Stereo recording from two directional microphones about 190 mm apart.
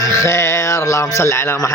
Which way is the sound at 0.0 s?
15° left (ahead or behind).